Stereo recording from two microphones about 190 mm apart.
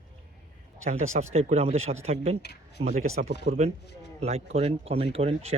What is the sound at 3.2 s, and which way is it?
Speech, 45° right (ahead or behind).